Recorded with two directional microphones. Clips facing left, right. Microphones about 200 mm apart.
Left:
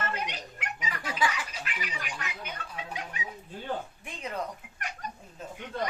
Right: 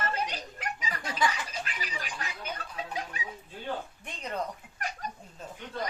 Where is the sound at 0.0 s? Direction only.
35° right (ahead or behind).